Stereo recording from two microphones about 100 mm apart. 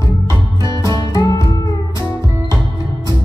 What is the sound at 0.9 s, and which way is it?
Music, 40° left (ahead or behind).